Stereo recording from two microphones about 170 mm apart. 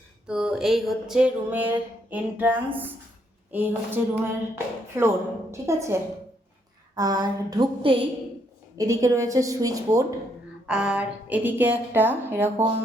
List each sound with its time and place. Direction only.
0.3 s a sound: 5° right (ahead or behind)
2.0 s a woman's voice: 10° right (ahead or behind); by 8.0 s 30° right (ahead or behind)
8.8 s a woman's voice: 20° right (ahead or behind)
10.7 s a woman's voice: 5° right (ahead or behind)